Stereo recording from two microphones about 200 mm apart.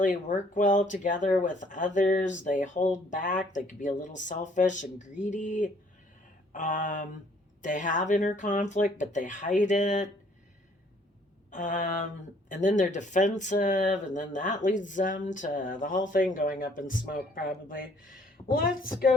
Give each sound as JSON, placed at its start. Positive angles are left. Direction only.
{"t": 0.0, "sound": "speech", "side_deg": 40}
{"t": 11.5, "sound": "mantra", "side_deg": 40}
{"t": 12.5, "sound": "a woman's voice", "side_deg": 35}